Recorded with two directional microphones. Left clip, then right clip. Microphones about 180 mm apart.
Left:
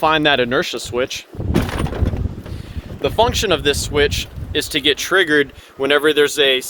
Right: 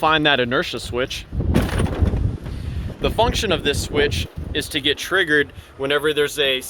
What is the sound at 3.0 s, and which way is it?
Speech, 20° left (ahead or behind).